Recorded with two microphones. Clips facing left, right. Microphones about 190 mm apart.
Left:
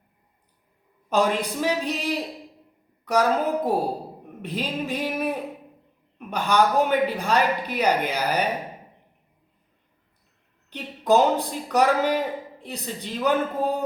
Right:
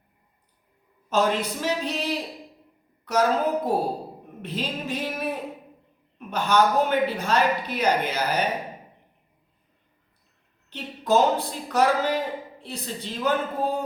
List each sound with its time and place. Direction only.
1.1 s speech: 15° left (ahead or behind)
10.7 s speech: 15° left (ahead or behind)